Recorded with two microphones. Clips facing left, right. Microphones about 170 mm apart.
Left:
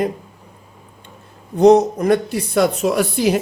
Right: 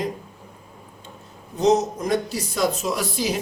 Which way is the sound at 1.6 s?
60° left (ahead or behind).